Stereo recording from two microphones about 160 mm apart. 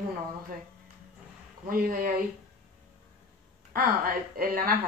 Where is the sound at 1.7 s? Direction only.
65° right (ahead or behind).